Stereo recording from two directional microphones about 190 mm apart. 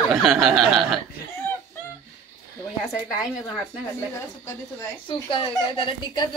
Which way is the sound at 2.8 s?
Centre (ahead or behind).